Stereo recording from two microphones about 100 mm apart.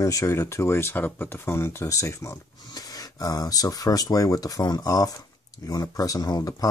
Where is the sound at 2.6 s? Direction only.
40° left (ahead or behind).